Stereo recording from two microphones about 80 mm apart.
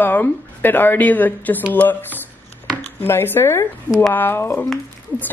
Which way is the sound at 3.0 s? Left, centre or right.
Left.